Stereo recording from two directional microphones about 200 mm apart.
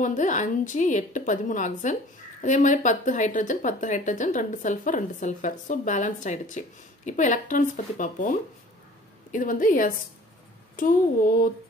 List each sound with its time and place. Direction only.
0.0 s a woman's voice: 40° left (ahead or behind)